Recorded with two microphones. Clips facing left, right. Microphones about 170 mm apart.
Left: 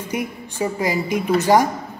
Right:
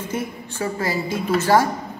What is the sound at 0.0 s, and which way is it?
Speech, 15° left (ahead or behind).